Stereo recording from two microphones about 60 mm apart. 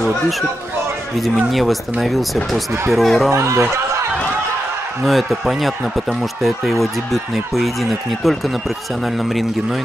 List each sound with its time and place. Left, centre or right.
1.2 s speech: centre
3.3 s speech: right
5.0 s speech: centre